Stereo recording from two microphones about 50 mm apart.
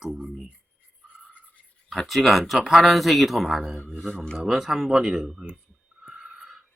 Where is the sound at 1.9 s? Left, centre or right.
Centre.